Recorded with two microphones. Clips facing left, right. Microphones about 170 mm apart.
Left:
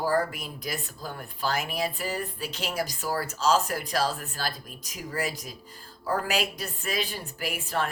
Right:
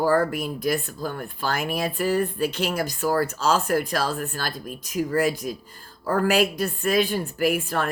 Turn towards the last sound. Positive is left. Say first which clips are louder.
# right 7 dB
turn(degrees=-55)  # may be behind; listen again after turning